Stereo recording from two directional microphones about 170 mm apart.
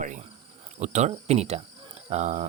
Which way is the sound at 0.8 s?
40° right (ahead or behind).